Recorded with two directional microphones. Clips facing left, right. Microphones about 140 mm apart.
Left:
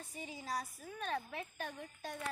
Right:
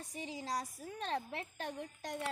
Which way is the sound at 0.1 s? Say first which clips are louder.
Right 2 dB; 90° right.